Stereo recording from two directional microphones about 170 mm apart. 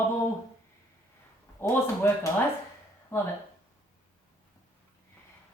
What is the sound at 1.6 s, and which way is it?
A man's voice, 20° left (ahead or behind).